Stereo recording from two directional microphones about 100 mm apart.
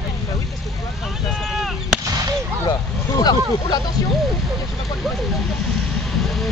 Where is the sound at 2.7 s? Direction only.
40° left (ahead or behind).